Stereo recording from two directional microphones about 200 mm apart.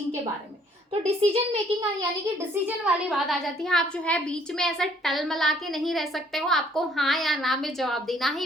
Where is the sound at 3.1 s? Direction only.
Centre (ahead or behind).